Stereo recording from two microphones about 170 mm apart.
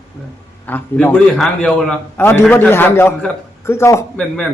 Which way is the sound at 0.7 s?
10° left (ahead or behind).